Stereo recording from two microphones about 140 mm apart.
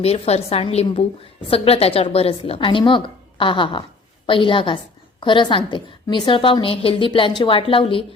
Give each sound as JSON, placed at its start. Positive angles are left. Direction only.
{"t": 0.0, "sound": "a woman's voice", "side_deg": 45}